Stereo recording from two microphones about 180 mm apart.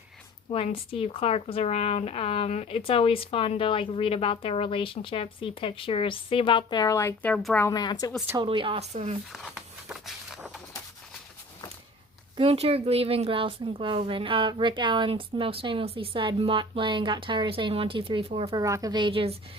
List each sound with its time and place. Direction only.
0.5 s speech: 30° left (ahead or behind); by 7.7 s 5° left (ahead or behind)
7.7 s speech: 25° left (ahead or behind)
8.4 s speech: 30° right (ahead or behind)
12.4 s speech: 35° right (ahead or behind)
18.6 s speech: 20° right (ahead or behind)